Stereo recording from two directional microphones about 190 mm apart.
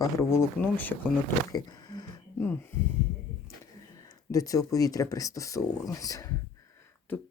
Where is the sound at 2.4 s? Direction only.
10° left (ahead or behind).